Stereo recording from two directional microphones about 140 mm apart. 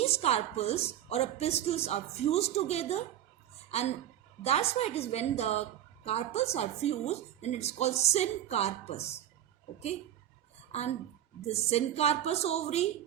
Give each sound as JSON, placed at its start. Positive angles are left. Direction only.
{"t": 0.0, "sound": "a woman's voice", "side_deg": 45}
{"t": 4.4, "sound": "a woman's voice", "side_deg": 45}
{"t": 10.7, "sound": "a woman's voice", "side_deg": 50}